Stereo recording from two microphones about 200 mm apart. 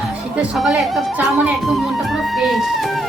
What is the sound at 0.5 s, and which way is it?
A man's voice, centre (ahead or behind).